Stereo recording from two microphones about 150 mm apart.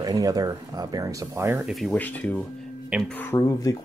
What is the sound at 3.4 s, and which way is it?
Speech, 25° left (ahead or behind).